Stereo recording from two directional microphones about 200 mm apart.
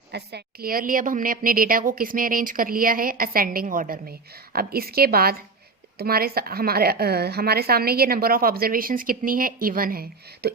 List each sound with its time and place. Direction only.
0.1 s a woman's voice: 55° right (ahead or behind)